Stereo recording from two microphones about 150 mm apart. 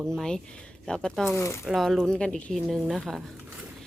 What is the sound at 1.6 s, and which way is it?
Speech, centre (ahead or behind).